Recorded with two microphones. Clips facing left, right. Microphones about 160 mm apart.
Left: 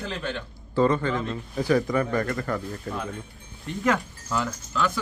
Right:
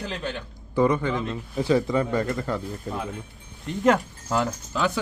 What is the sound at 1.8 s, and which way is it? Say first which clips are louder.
A man's voice: right 1 dB; 20° right (ahead or behind).